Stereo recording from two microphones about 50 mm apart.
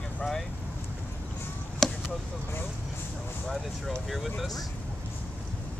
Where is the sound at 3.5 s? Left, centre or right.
Centre.